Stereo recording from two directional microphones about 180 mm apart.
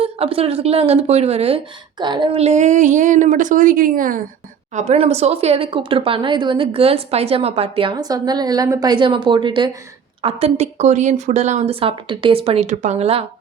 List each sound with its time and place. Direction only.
0.0 s speech: 30° right (ahead or behind)